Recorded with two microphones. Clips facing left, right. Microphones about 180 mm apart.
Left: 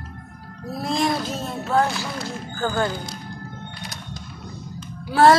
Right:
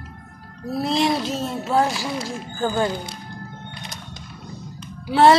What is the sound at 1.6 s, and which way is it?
Speech, 5° right (ahead or behind).